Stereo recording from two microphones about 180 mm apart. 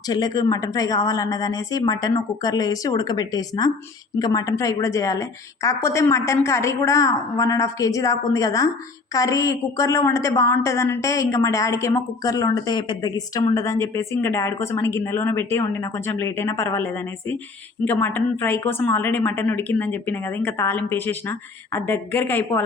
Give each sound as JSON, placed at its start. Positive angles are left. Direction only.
{"t": 0.1, "sound": "a woman's voice", "side_deg": 20}